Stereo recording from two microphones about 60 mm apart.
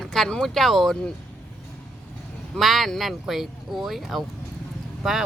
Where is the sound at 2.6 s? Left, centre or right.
Centre.